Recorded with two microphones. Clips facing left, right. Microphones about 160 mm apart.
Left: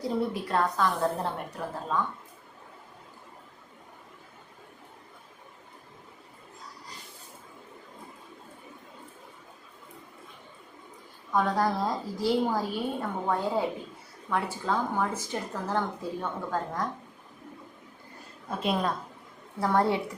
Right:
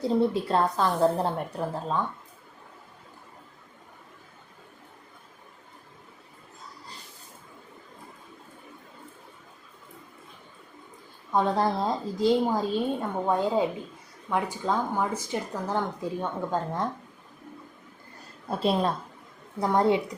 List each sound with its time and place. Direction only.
0.0 s a woman's voice: 30° right (ahead or behind)
11.3 s a woman's voice: 25° right (ahead or behind)
18.6 s a woman's voice: 30° right (ahead or behind)
19.5 s a woman's voice: 20° right (ahead or behind)